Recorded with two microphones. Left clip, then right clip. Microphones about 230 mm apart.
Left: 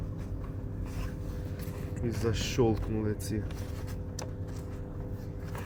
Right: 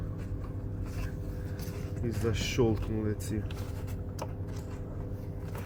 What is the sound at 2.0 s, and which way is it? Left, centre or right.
Speech, centre.